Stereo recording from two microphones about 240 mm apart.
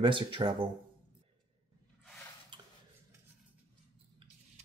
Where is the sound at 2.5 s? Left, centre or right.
Centre.